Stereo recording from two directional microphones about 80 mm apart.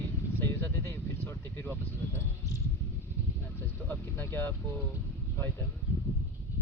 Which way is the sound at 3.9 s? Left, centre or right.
Left.